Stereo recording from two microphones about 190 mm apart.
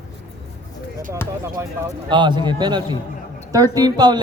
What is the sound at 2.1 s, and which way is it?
A man's voice, 25° right (ahead or behind).